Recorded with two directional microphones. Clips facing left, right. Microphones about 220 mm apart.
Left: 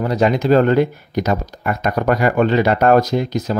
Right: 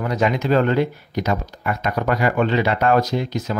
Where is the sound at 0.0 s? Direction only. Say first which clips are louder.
Left 4 dB; 35° left (ahead or behind).